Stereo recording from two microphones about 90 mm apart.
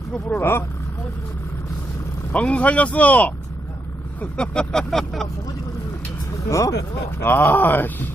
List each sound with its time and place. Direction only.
0.3 s speech: 30° left (ahead or behind)
2.3 s vehicle: 15° left (ahead or behind)
6.5 s speech: 40° left (ahead or behind)
7.2 s speech: 25° left (ahead or behind)